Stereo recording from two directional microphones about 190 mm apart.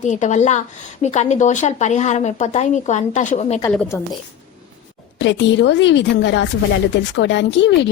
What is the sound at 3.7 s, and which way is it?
Speech, 10° left (ahead or behind).